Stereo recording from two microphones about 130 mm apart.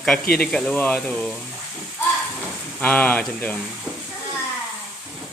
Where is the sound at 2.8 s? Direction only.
10° left (ahead or behind).